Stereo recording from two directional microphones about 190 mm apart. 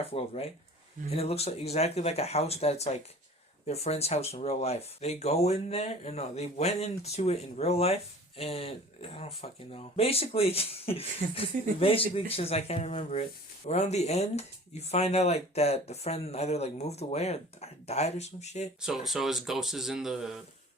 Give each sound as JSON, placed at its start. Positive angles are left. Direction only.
{"t": 0.1, "sound": "speech", "side_deg": 30}
{"t": 18.8, "sound": "speech", "side_deg": 0}